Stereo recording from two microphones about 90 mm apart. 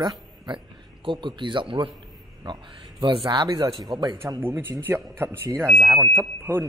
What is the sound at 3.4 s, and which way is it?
Speech, 40° right (ahead or behind).